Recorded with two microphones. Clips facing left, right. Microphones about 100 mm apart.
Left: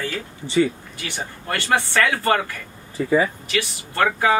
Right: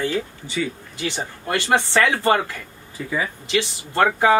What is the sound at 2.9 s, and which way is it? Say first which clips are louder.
Speech: left 7 dB; 35° left (ahead or behind).